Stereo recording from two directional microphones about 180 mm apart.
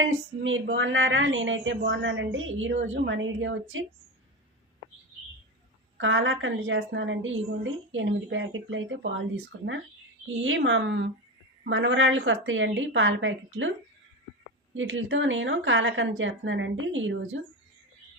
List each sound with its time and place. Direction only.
0.0 s a woman's voice: 90° right
6.0 s a woman's voice: 90° right
10.4 s a woman's voice: 90° right
14.7 s a woman's voice: 90° right